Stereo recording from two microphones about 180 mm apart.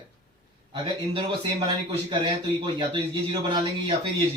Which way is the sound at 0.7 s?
25° right (ahead or behind).